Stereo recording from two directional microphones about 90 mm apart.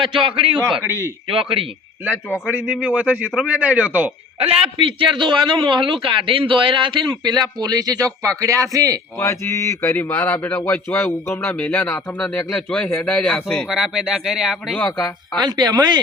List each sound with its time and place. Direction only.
0.0 s a man's voice: 65° right (ahead or behind)
0.9 s a man's voice: 30° right (ahead or behind)
1.3 s speech: 90° right
2.5 s a man's voice: 15° right (ahead or behind)
4.4 s a man's voice: 90° right; by 9.0 s 40° right (ahead or behind)
9.1 s a man's voice: 30° left (ahead or behind); by 13.7 s 10° left (ahead or behind)
13.7 s speech: 5° right (ahead or behind)
14.8 s a man's voice: 20° left (ahead or behind)
15.4 s speech: 50° right (ahead or behind)